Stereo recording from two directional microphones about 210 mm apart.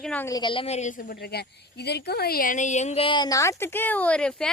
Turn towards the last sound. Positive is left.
turn(degrees=5)  # may be behind; listen again after turning